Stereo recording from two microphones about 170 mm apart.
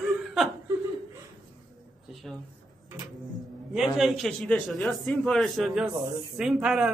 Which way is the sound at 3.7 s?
Centre (ahead or behind).